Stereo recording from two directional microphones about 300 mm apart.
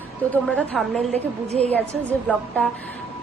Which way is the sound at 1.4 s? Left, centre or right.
Right.